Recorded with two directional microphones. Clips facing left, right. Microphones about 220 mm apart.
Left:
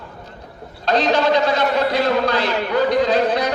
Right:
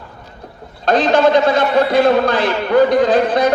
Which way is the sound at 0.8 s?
50° right (ahead or behind).